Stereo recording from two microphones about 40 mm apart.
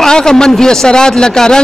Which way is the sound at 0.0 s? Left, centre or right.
Centre.